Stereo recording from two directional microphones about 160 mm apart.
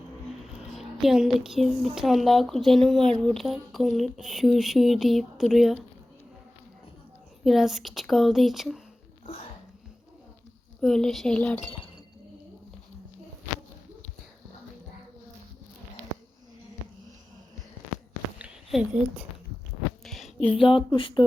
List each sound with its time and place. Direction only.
0.6 s speech: centre (ahead or behind)
7.4 s speech: centre (ahead or behind)
10.8 s speech: centre (ahead or behind)
18.3 s a sound: 10° right (ahead or behind)
20.4 s speech: 35° left (ahead or behind)